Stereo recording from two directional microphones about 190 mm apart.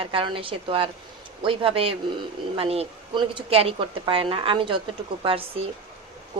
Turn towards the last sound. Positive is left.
turn(degrees=-30)  # may be behind; listen again after turning